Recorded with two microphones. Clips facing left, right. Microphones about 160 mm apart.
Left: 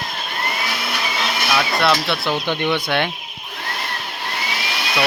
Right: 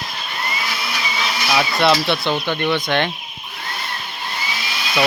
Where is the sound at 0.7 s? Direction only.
55° left (ahead or behind).